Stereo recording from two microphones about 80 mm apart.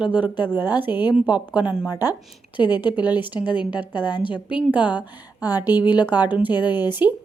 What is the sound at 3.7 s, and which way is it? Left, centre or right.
Speech, left.